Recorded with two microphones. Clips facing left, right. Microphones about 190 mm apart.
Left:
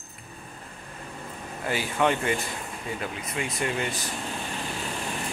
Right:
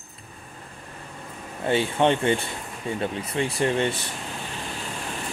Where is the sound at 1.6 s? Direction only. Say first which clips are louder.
Right 4 dB; 25° right (ahead or behind).